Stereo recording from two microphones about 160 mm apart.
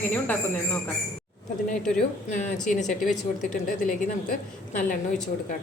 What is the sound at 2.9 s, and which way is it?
Speech, 50° left (ahead or behind).